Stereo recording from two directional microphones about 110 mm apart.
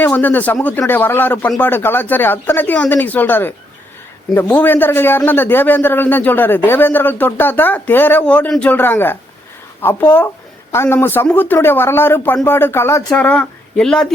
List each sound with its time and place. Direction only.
0.0 s a man's voice: 15° left (ahead or behind)
13.1 s speech: 10° left (ahead or behind)